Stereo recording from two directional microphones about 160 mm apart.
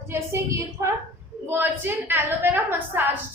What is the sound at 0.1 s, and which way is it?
A woman's voice, 15° right (ahead or behind).